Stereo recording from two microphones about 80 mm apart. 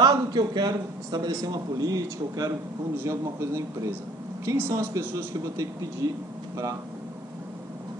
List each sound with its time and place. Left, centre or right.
0.0 s a man's voice: right
3.0 s a man's voice: right